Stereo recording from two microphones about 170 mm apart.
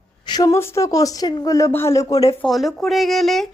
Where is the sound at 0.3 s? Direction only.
20° left (ahead or behind).